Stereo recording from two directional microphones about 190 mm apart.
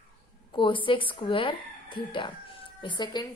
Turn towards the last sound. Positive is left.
turn(degrees=20)  # may be behind; listen again after turning